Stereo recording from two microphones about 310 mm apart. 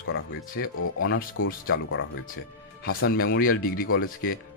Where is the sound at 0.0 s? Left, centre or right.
Left.